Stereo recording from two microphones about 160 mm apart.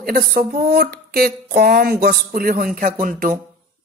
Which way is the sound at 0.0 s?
70° right (ahead or behind).